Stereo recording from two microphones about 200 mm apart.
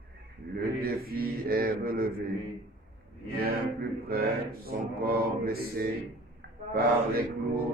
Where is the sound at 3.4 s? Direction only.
50° right (ahead or behind).